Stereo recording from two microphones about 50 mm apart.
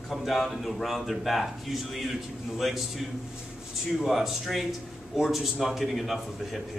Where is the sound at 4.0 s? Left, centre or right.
Centre.